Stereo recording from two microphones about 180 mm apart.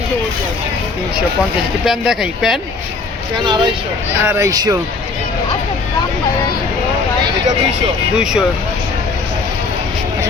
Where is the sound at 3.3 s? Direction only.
25° right (ahead or behind).